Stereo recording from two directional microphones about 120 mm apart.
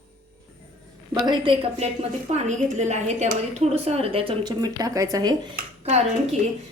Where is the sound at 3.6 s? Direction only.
60° right (ahead or behind).